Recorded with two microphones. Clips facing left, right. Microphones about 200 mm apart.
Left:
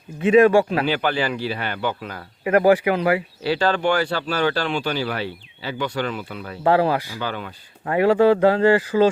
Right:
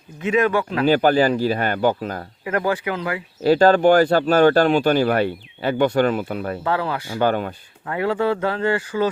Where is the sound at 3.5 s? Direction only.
45° right (ahead or behind).